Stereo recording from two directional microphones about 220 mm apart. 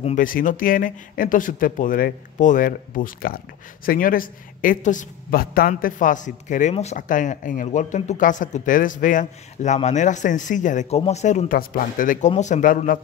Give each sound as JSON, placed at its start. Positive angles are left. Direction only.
{"t": 0.0, "sound": "a woman's voice", "side_deg": 35}